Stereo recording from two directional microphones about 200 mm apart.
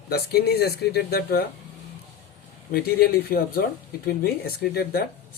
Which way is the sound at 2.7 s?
50° left (ahead or behind).